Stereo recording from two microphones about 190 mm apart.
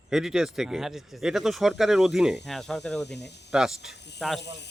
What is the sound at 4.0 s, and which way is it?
Snake, 65° left (ahead or behind).